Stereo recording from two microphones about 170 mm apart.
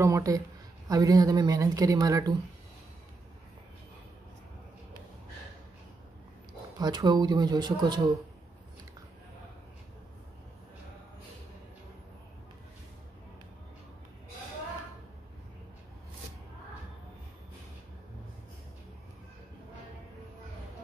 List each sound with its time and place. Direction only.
0.0 s speech: 20° right (ahead or behind)
6.8 s speech: 25° right (ahead or behind)